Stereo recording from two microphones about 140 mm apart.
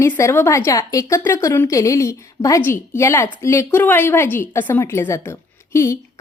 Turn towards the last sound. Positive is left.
turn(degrees=20)  # may be behind; listen again after turning